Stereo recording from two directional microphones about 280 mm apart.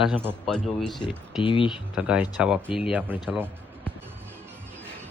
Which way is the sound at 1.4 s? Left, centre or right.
Centre.